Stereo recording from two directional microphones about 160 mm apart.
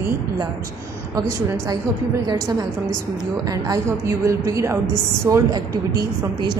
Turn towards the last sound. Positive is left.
turn(degrees=-20)  # may be behind; listen again after turning